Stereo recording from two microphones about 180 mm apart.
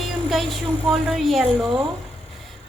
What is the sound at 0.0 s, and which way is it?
A woman's voice, centre (ahead or behind).